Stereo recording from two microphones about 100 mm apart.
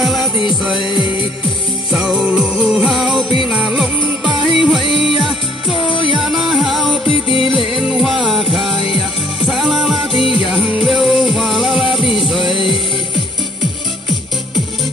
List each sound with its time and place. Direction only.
0.0 s music: centre (ahead or behind)
1.9 s music: 5° right (ahead or behind)
5.9 s music: 60° left (ahead or behind)
6.1 s music: centre (ahead or behind)
7.1 s music: 65° left (ahead or behind)
7.5 s music: 5° right (ahead or behind)